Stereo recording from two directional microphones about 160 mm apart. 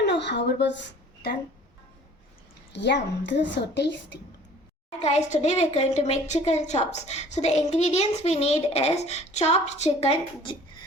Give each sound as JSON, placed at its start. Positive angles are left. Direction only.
{"t": 0.0, "sound": "a woman's voice", "side_deg": 90}
{"t": 2.7, "sound": "a woman's voice", "side_deg": 90}
{"t": 4.9, "sound": "a woman's voice", "side_deg": 45}